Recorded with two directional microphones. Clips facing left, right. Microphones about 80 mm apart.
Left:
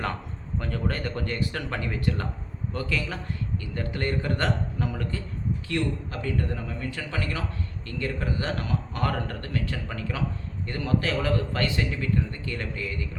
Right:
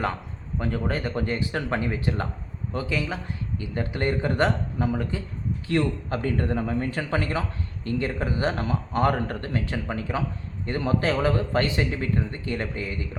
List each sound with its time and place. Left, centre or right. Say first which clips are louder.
0.8 s a man's voice: right 1 dB; centre
5.6 s speech: right 6 dB; right